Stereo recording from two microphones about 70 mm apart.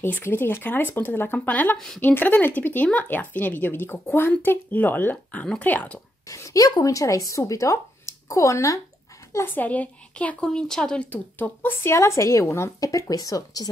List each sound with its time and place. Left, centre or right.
0.0 s speech: left
6.2 s speech: left
9.3 s a woman's voice: left
9.6 s a woman's voice: left
12.8 s speech: left